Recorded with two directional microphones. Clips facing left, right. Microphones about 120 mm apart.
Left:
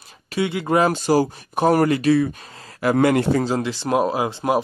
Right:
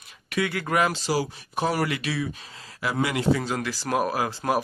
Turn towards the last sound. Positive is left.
turn(degrees=20)  # may be behind; listen again after turning